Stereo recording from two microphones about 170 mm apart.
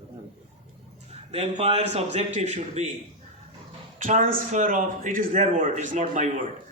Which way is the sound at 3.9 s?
50° right (ahead or behind).